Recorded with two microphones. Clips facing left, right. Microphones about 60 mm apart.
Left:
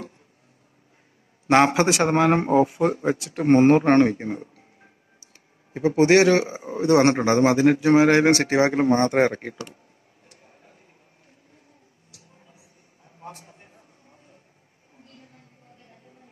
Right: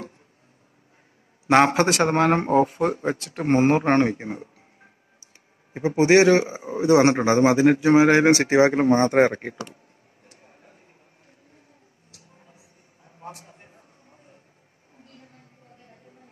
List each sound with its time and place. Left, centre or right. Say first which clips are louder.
1.7 s a man's voice: even; right
3.1 s speech: left 2 dB; centre
3.3 s speech: left 4 dB; centre
5.8 s a man's voice: even; right
13.0 s a sound: right 1 dB; centre